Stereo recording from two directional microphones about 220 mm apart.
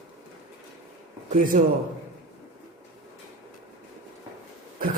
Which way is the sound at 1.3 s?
40° right (ahead or behind).